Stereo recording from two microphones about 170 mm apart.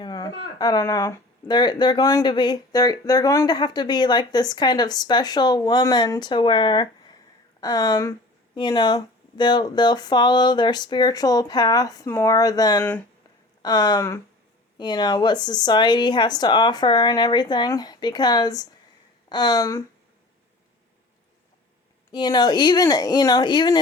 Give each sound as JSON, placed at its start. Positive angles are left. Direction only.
{"t": 0.0, "sound": "speech", "side_deg": 25}
{"t": 22.1, "sound": "speech", "side_deg": 25}